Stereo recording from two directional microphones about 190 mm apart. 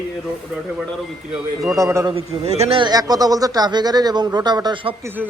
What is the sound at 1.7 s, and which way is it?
Speech, 15° right (ahead or behind).